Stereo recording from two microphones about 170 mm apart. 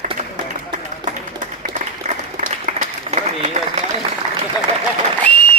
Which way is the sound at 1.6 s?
50° right (ahead or behind).